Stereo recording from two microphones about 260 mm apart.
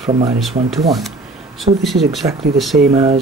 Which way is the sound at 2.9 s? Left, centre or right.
Right.